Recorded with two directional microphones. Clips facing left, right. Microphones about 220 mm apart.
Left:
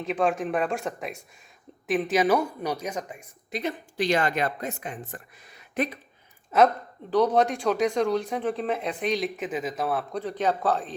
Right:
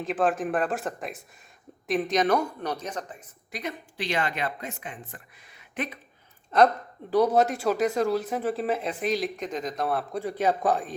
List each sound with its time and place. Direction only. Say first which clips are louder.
0.0 s speech: even; centre (ahead or behind)
3.5 s speech: left 4 dB; 30° left (ahead or behind)
3.9 s speech: left 5 dB; 45° left (ahead or behind)
6.5 s speech: even; 5° left (ahead or behind)
7.1 s speech: even; 10° right (ahead or behind)